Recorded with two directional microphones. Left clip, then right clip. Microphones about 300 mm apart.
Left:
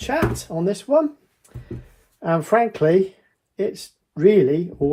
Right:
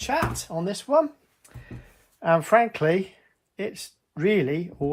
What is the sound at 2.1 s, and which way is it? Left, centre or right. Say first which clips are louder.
Speech: left 1 dB; centre.